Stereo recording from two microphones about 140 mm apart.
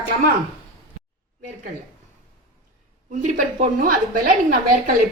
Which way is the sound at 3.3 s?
70° right (ahead or behind).